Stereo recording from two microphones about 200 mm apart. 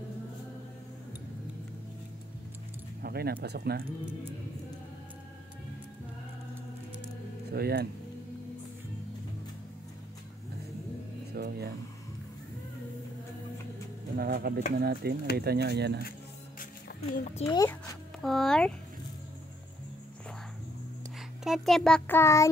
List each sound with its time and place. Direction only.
3.0 s speech: 50° right (ahead or behind)
7.5 s speech: 50° right (ahead or behind)
11.3 s a sound: 50° right (ahead or behind)
14.1 s speech: 50° right (ahead or behind)
17.1 s a child's voice: 40° left (ahead or behind)
17.5 s child singing: 15° left (ahead or behind)
18.2 s speech: centre (ahead or behind)
21.5 s child singing: centre (ahead or behind)